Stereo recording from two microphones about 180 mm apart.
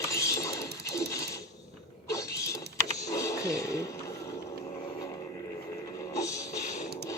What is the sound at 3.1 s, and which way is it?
Music, 15° left (ahead or behind).